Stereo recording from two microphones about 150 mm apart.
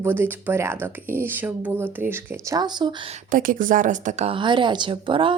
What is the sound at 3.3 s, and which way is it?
Speech, 65° right (ahead or behind).